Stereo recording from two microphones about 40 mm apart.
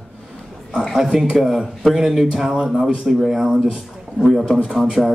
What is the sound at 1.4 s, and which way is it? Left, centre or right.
A man's voice, centre.